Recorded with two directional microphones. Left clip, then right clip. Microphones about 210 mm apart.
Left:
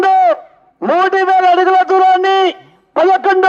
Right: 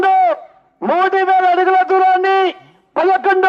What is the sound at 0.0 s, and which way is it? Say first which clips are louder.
Owl: left 2 dB; 45° left (ahead or behind).